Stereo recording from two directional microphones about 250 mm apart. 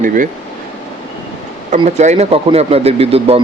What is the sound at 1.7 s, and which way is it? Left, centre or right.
Speech, right.